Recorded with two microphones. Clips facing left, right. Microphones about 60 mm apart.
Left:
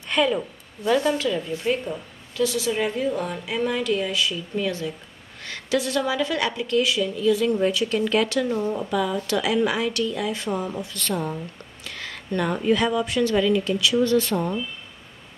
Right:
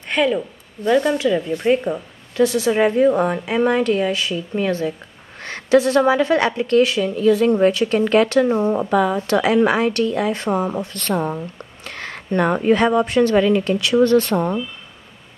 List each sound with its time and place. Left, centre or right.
0.1 s speech: centre
1.2 s speech: right
1.7 s a woman's voice: right